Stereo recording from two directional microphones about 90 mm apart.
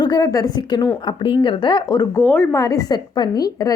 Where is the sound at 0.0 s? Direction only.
45° left (ahead or behind).